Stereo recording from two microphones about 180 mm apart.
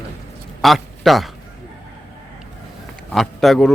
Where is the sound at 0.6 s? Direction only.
Centre (ahead or behind).